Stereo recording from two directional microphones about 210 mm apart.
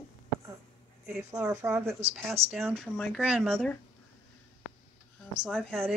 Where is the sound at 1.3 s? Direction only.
15° right (ahead or behind).